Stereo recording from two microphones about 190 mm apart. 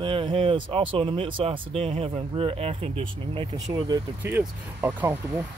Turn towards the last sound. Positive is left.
turn(degrees=-10)  # may be behind; listen again after turning